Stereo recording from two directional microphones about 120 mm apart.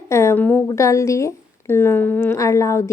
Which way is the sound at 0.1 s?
25° left (ahead or behind).